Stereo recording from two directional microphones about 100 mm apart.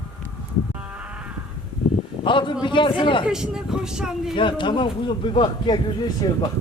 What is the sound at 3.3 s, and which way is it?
Speech, 5° right (ahead or behind).